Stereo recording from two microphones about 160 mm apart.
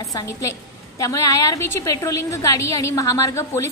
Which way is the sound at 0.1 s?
20° left (ahead or behind).